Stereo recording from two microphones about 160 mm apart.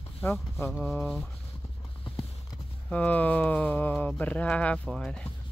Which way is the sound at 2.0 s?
30° left (ahead or behind).